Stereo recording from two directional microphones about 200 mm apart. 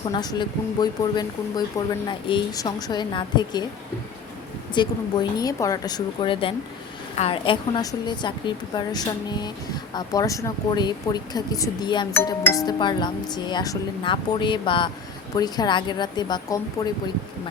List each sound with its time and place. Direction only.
0.0 s speech: 20° left (ahead or behind)
4.7 s speech: 20° left (ahead or behind)
12.1 s speech: 10° left (ahead or behind)